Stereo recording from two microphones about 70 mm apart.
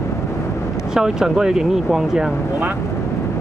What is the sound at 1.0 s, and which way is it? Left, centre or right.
Speech, centre.